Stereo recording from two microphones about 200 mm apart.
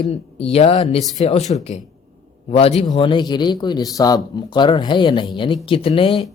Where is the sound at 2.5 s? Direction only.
30° left (ahead or behind).